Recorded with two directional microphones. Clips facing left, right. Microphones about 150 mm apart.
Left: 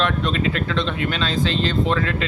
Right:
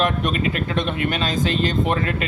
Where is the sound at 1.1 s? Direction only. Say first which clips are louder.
Left 1 dB; 45° right (ahead or behind).